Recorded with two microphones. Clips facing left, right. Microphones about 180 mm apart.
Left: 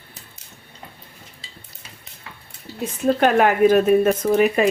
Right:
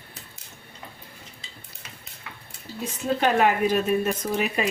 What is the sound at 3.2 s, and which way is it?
Speech, 55° left (ahead or behind).